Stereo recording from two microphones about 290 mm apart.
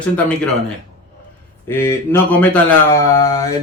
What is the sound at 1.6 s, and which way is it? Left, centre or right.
Speech, centre.